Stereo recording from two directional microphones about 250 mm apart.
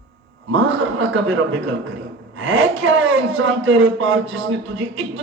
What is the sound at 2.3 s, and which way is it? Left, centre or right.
A man's voice, right.